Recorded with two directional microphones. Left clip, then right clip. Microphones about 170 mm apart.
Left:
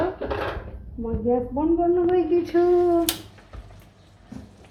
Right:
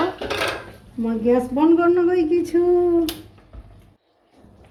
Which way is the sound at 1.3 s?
90° right.